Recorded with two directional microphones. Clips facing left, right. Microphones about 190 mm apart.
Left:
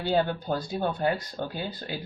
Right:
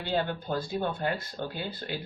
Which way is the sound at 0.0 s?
45° left (ahead or behind).